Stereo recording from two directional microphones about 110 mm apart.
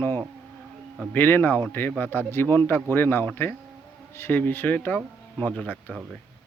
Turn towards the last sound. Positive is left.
turn(degrees=10)  # may be behind; listen again after turning